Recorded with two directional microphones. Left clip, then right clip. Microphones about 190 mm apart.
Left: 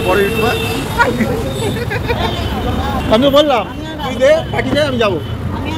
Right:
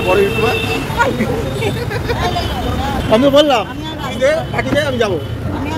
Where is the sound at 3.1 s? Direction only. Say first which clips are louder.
Even; 25° right (ahead or behind).